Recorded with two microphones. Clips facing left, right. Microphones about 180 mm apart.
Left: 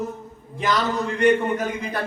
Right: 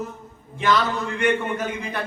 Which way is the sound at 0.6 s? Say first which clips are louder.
Right 1 dB; 40° left (ahead or behind).